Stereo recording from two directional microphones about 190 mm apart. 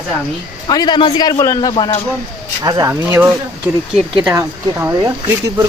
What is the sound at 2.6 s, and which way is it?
Speech, 15° right (ahead or behind).